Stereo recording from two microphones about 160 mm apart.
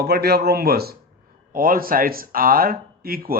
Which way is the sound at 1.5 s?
60° right (ahead or behind).